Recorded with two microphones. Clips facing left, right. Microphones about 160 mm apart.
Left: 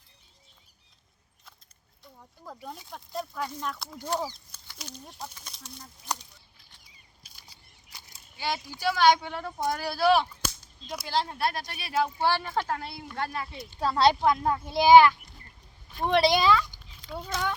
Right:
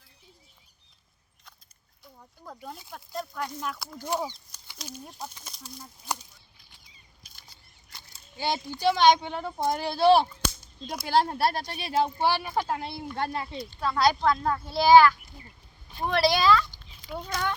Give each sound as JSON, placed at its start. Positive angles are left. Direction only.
{"t": 2.1, "sound": "speech", "side_deg": 0}
{"t": 7.3, "sound": "scissors", "side_deg": 5}
{"t": 8.4, "sound": "speech", "side_deg": -25}
{"t": 10.8, "sound": "speech", "side_deg": -55}
{"t": 11.3, "sound": "speech", "side_deg": -30}
{"t": 12.2, "sound": "speech", "side_deg": -15}
{"t": 13.7, "sound": "speech", "side_deg": 30}
{"t": 14.2, "sound": "speech", "side_deg": 15}